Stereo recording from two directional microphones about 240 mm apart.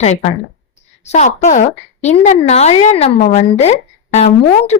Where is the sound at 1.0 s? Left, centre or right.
Left.